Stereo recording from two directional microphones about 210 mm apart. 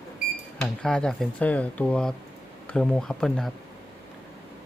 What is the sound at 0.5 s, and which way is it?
Speech, 5° left (ahead or behind).